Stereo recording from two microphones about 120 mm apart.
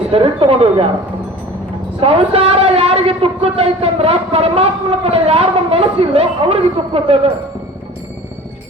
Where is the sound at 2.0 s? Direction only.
50° right (ahead or behind).